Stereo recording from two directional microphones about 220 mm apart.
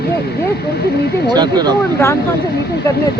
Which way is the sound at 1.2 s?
20° right (ahead or behind).